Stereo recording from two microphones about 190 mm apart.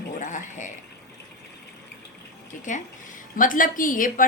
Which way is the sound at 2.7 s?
40° left (ahead or behind).